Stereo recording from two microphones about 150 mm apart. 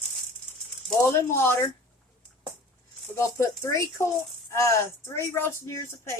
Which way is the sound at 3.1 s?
20° left (ahead or behind).